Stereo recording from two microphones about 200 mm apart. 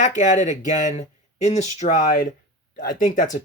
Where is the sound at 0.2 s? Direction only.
35° left (ahead or behind).